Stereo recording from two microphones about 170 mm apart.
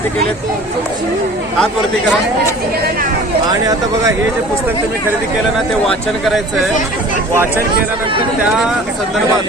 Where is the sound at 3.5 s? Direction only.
20° right (ahead or behind).